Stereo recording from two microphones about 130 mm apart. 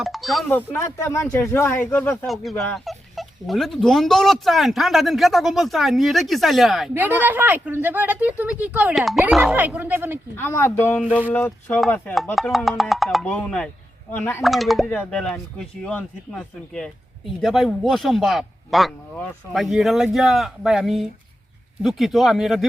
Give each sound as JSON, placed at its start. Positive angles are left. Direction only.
{"t": 0.0, "sound": "speech", "side_deg": 0}
{"t": 0.4, "sound": "speech", "side_deg": 15}
{"t": 2.2, "sound": "speech", "side_deg": 0}
{"t": 6.9, "sound": "speech", "side_deg": -15}
{"t": 9.6, "sound": "speech", "side_deg": -15}
{"t": 10.3, "sound": "speech", "side_deg": 15}
{"t": 12.1, "sound": "speech", "side_deg": 0}
{"t": 14.4, "sound": "speech", "side_deg": 0}
{"t": 14.8, "sound": "speech", "side_deg": 10}